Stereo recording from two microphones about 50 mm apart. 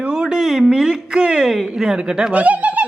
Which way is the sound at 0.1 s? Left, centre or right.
Centre.